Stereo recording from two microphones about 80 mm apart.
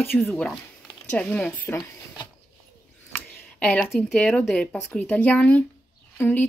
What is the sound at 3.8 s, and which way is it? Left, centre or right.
Speech, centre.